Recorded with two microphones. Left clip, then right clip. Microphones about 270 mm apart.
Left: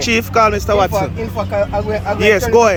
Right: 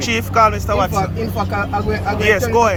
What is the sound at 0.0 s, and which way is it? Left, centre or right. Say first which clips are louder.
Speech: left 1 dB; centre.